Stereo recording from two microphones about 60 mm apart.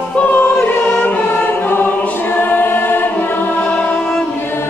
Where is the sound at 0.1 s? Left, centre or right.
Left.